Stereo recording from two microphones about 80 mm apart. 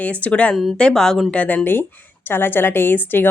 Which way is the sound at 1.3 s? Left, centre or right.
Centre.